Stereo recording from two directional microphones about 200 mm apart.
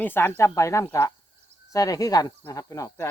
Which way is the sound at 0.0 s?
10° left (ahead or behind).